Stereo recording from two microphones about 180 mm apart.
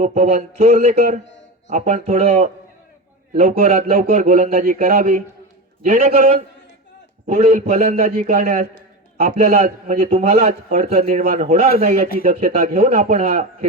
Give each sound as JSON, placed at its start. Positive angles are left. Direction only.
{"t": 0.0, "sound": "a man's voice", "side_deg": -40}
{"t": 0.9, "sound": "a man's voice", "side_deg": -50}
{"t": 1.2, "sound": "a sound", "side_deg": 85}
{"t": 1.7, "sound": "a man's voice", "side_deg": -40}
{"t": 11.2, "sound": "a man's voice", "side_deg": -55}
{"t": 11.4, "sound": "a man's voice", "side_deg": -40}
{"t": 12.9, "sound": "a man's voice", "side_deg": -50}